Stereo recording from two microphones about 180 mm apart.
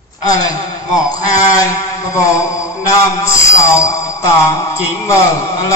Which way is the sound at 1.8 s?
15° left (ahead or behind).